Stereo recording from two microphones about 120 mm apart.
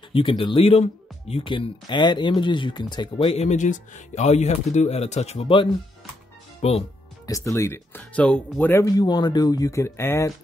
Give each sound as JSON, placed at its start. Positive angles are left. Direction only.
{"t": 0.1, "sound": "speech", "side_deg": 45}
{"t": 3.3, "sound": "speech", "side_deg": 80}
{"t": 6.6, "sound": "speech", "side_deg": 60}
{"t": 7.2, "sound": "speech", "side_deg": 25}
{"t": 8.9, "sound": "speech", "side_deg": 35}